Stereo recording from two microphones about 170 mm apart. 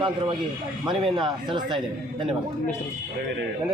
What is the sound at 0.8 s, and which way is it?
Speech, 30° right (ahead or behind).